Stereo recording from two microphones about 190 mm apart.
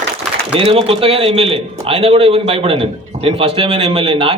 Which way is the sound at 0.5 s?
30° right (ahead or behind).